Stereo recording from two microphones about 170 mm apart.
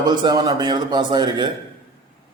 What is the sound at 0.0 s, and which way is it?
A man's voice, 25° right (ahead or behind).